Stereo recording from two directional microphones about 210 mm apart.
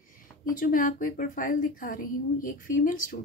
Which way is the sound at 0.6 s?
40° left (ahead or behind).